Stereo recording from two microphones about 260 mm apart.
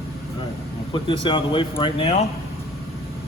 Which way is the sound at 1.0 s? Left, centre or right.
Centre.